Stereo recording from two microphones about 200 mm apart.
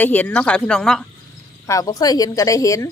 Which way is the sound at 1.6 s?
15° left (ahead or behind).